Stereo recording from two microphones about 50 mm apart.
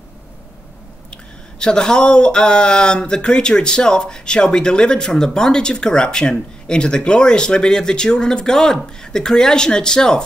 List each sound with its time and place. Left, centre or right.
1.1 s speech: centre